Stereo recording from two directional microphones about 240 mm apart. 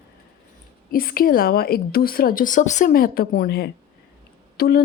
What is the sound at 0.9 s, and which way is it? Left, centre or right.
A woman's voice, left.